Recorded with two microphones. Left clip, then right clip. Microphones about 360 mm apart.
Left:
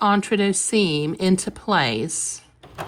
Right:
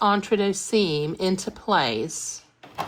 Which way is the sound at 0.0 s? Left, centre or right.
Left.